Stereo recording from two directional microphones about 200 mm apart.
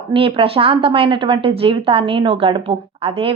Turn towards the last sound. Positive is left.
turn(degrees=-30)  # may be behind; listen again after turning